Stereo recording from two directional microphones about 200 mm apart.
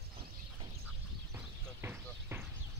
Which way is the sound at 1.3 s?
10° right (ahead or behind).